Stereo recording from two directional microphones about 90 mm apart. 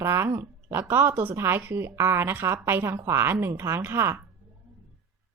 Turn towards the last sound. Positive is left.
turn(degrees=-25)  # may be behind; listen again after turning